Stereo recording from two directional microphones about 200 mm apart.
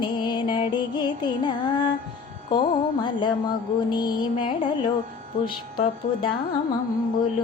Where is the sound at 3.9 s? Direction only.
20° left (ahead or behind).